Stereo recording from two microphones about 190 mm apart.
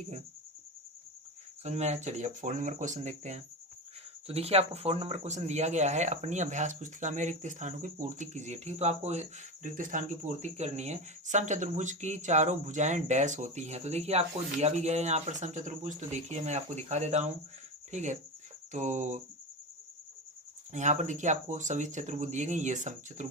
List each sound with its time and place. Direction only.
1.6 s speech: 35° right (ahead or behind)
20.7 s speech: 40° right (ahead or behind)